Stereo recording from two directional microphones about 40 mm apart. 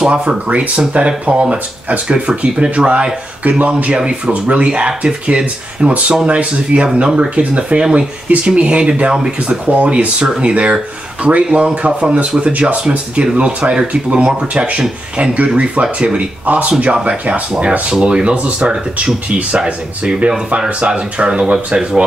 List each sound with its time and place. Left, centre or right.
0.0 s speech: right
3.4 s speech: right
3.9 s speech: right
4.6 s speech: right
15.3 s speech: right
16.4 s speech: right
17.8 s speech: right
18.2 s speech: right
20.0 s speech: right